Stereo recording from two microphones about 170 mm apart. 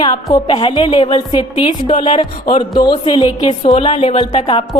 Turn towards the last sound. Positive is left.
turn(degrees=30)  # may be behind; listen again after turning